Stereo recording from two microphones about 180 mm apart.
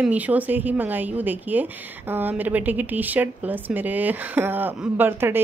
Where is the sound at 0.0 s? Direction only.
10° right (ahead or behind).